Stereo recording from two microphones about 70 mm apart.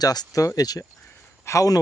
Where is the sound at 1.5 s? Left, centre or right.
Left.